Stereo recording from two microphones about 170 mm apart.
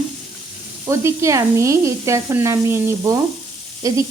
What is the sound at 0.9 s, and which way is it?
A woman's voice, 15° right (ahead or behind).